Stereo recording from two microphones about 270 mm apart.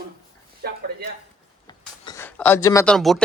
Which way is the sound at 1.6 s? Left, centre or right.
Centre.